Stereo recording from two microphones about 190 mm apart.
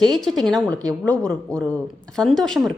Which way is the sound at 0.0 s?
Centre (ahead or behind).